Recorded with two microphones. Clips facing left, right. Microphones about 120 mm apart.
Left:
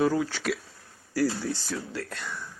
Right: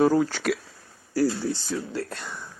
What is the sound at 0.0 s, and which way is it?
Speech, 45° right (ahead or behind).